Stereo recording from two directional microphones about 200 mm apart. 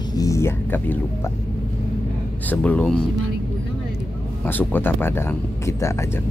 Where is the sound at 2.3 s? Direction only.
10° left (ahead or behind).